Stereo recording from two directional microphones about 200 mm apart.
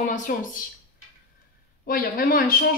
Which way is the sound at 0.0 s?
40° left (ahead or behind).